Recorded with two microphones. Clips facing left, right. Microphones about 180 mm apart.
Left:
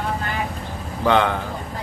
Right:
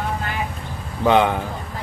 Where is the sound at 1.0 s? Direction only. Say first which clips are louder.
Right 2 dB; 15° right (ahead or behind).